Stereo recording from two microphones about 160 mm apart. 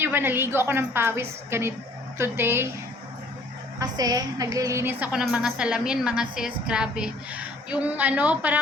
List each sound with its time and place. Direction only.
0.0 s a woman's voice: 15° right (ahead or behind)
3.8 s a woman's voice: 25° right (ahead or behind)